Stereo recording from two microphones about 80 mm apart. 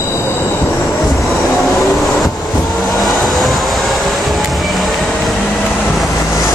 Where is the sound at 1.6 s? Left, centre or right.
Centre.